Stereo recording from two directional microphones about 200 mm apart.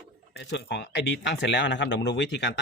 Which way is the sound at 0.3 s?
60° left (ahead or behind).